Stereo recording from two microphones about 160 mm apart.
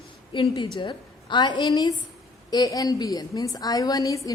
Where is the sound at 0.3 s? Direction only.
30° left (ahead or behind).